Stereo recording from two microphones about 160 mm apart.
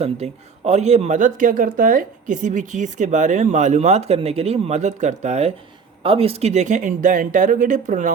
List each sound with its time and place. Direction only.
0.0 s speech: 40° right (ahead or behind)